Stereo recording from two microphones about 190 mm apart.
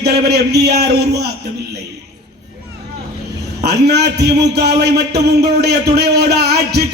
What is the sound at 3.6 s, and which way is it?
A man's voice, 60° right (ahead or behind).